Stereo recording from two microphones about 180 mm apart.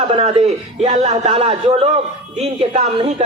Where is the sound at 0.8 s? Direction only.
35° right (ahead or behind).